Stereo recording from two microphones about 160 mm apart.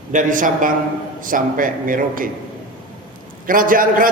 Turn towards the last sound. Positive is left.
turn(degrees=-60)  # may be behind; listen again after turning